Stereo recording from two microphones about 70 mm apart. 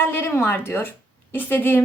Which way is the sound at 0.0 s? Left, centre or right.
Left.